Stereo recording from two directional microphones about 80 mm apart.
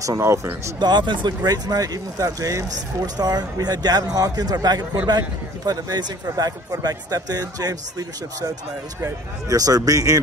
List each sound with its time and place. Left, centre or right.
0.2 s speech: right
0.7 s speech: right
1.4 s a man's voice: right
9.0 s speech: right